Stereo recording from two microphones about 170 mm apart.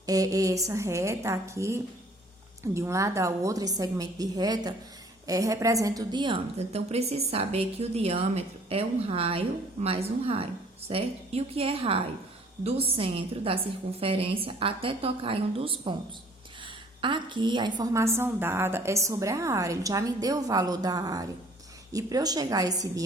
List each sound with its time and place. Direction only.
0.0 s a woman's voice: 20° right (ahead or behind)
17.0 s a woman's voice: 30° right (ahead or behind)